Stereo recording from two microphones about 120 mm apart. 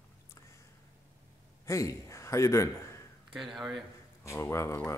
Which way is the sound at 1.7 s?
25° left (ahead or behind).